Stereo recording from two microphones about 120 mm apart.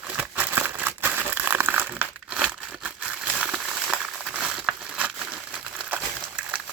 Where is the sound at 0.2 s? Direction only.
15° right (ahead or behind).